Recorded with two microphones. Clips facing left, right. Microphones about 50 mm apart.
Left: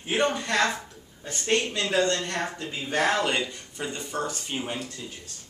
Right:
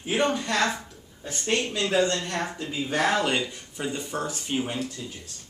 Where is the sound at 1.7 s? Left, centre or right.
Centre.